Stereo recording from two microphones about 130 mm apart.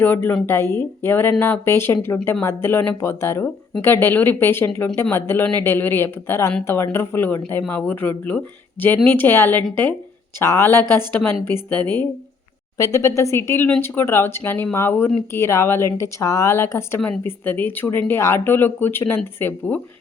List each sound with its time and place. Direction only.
0.0 s speech: 15° left (ahead or behind)
12.7 s speech: 25° left (ahead or behind)